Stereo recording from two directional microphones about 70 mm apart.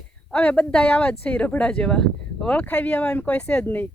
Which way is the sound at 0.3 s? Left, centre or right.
Centre.